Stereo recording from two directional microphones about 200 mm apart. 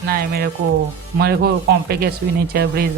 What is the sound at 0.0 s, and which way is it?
Speech, 50° right (ahead or behind).